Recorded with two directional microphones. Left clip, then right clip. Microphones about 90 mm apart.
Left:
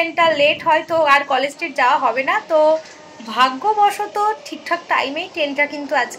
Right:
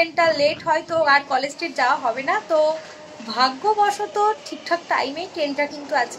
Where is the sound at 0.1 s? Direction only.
20° left (ahead or behind).